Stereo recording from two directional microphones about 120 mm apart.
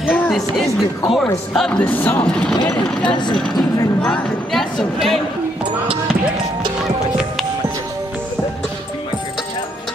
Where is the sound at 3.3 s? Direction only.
5° left (ahead or behind).